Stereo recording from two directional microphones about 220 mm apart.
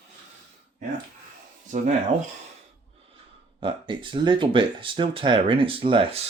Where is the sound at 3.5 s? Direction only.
20° right (ahead or behind).